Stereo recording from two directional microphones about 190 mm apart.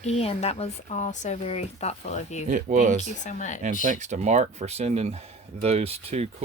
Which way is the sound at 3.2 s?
40° left (ahead or behind).